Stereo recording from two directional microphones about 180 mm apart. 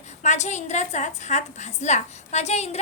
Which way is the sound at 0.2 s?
40° left (ahead or behind).